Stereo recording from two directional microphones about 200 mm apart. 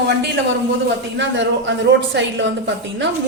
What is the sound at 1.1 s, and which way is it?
A woman's voice, 65° right (ahead or behind).